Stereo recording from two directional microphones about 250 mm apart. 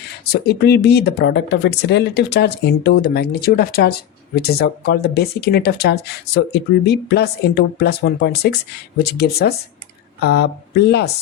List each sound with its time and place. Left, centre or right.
0.3 s speech: left